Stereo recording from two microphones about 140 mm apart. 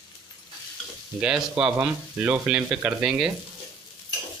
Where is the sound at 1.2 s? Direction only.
5° right (ahead or behind).